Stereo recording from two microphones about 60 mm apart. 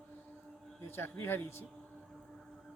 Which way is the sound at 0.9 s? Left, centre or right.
Left.